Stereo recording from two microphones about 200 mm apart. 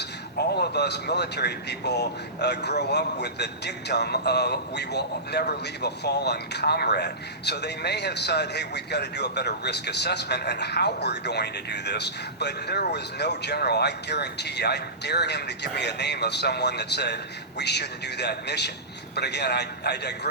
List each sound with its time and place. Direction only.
0.0 s a man's voice: 55° left (ahead or behind)